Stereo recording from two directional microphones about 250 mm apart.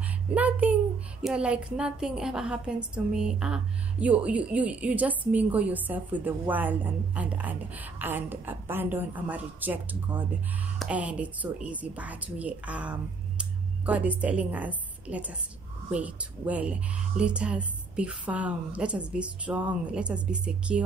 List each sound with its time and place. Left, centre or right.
0.0 s a child's voice: centre